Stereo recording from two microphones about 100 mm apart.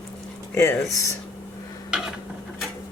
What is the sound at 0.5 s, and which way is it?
Speech, 25° left (ahead or behind).